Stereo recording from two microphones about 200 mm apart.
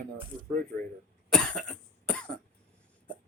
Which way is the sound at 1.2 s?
5° left (ahead or behind).